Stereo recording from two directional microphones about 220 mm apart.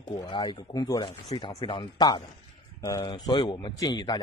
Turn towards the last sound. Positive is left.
turn(degrees=20)  # may be behind; listen again after turning